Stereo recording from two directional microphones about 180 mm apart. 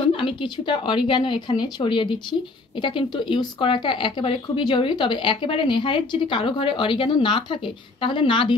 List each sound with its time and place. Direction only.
0.1 s speech: 30° left (ahead or behind)